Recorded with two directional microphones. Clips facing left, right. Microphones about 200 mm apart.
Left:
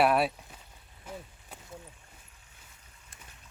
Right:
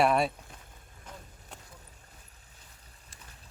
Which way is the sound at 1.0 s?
5° left (ahead or behind).